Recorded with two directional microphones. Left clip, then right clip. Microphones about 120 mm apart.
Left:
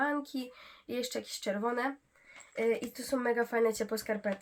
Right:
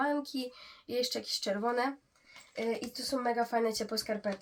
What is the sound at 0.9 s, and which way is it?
Speech, 5° right (ahead or behind).